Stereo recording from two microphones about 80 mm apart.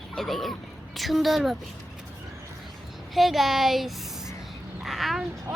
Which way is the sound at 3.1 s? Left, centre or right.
Centre.